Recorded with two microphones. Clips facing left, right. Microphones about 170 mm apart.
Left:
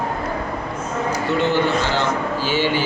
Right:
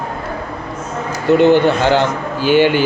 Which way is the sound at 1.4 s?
60° right (ahead or behind).